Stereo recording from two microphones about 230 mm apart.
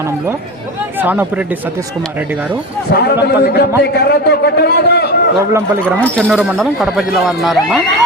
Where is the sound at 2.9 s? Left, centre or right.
Left.